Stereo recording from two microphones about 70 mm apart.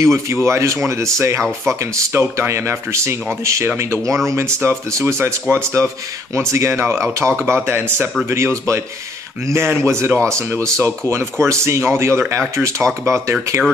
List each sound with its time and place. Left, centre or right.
0.0 s speech: right